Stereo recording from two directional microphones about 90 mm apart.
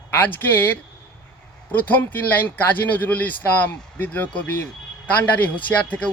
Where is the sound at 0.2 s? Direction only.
20° left (ahead or behind).